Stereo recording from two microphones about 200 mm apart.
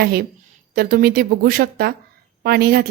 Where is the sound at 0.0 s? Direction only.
50° right (ahead or behind).